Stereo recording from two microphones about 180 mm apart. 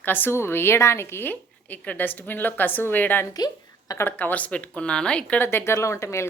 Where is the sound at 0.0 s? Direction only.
10° left (ahead or behind).